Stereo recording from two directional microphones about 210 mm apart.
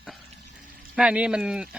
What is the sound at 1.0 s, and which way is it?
Speech, 5° right (ahead or behind).